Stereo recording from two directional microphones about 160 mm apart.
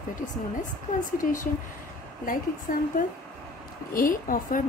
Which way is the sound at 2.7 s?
55° left (ahead or behind).